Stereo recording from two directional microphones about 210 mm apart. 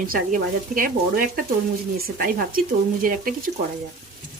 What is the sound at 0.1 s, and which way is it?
Speech, 40° right (ahead or behind).